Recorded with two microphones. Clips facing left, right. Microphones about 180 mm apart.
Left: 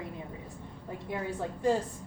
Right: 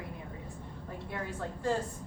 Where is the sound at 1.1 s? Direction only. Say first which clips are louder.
Left 4 dB; 15° left (ahead or behind).